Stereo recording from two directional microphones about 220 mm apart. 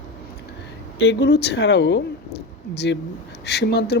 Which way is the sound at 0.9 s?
50° left (ahead or behind).